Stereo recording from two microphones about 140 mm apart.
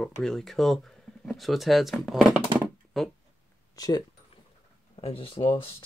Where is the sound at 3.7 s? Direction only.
25° left (ahead or behind).